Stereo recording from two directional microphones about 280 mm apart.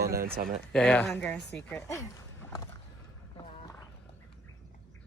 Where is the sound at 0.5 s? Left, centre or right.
Centre.